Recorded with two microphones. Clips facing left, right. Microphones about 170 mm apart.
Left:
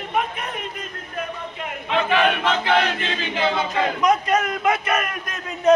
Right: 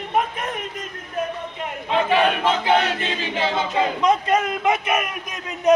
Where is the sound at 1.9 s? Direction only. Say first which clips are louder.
Right 1 dB; 35° right (ahead or behind).